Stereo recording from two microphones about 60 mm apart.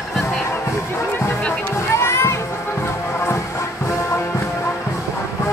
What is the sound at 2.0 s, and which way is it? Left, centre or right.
Music, left.